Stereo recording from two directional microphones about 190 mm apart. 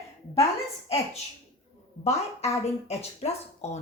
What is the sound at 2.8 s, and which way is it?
Speech, 35° left (ahead or behind).